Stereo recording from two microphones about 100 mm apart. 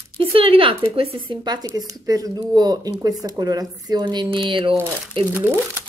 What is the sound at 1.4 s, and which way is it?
Speech, 40° right (ahead or behind).